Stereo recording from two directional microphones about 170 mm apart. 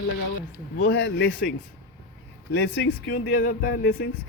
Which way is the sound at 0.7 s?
70° left (ahead or behind).